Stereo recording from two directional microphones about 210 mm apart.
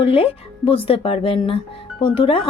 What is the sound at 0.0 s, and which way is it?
Speech, 25° left (ahead or behind).